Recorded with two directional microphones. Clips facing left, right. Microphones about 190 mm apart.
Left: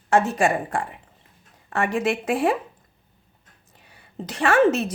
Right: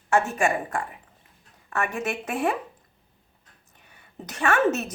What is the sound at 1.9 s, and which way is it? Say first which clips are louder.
Speech: left 6 dB; 30° left (ahead or behind).